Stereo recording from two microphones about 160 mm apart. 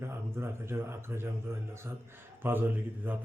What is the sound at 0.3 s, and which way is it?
Speech, 15° right (ahead or behind).